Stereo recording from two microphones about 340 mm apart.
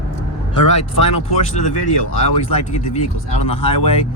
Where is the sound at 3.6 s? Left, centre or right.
Centre.